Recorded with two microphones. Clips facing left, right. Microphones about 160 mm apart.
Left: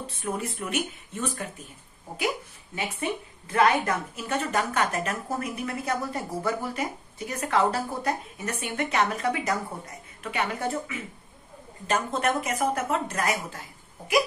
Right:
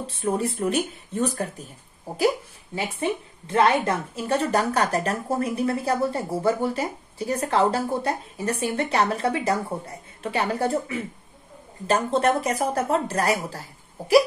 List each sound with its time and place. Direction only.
0.0 s a woman's voice: 30° right (ahead or behind)